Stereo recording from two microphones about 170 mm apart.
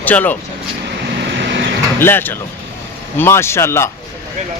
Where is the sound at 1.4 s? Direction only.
90° right.